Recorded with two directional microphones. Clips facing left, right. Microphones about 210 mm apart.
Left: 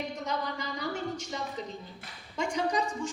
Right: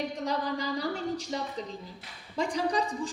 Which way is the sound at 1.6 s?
35° right (ahead or behind).